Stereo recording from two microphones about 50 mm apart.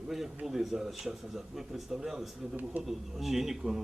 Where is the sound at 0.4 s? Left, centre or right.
Centre.